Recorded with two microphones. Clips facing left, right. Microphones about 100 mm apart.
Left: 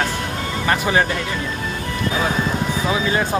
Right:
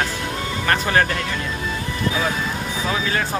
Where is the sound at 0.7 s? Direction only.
15° left (ahead or behind).